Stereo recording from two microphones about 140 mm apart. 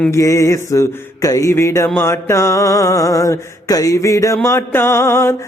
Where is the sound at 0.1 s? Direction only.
25° left (ahead or behind).